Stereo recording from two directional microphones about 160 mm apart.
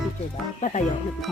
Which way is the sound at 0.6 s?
50° left (ahead or behind).